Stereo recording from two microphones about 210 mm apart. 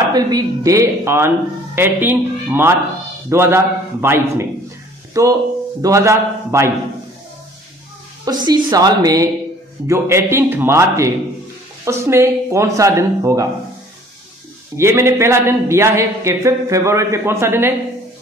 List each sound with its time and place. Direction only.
0.1 s a man's voice: 15° right (ahead or behind)
8.3 s a woman's voice: 20° right (ahead or behind)
14.8 s a man's voice: 10° right (ahead or behind)